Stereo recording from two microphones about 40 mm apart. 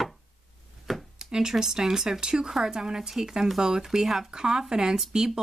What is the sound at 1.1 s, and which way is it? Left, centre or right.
Speech, centre.